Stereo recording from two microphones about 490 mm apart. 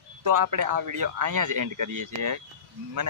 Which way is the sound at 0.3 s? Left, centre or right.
Right.